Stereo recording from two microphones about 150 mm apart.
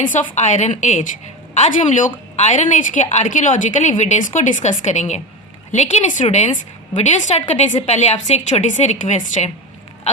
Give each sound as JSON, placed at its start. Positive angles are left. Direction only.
{"t": 0.0, "sound": "a woman's voice", "side_deg": 55}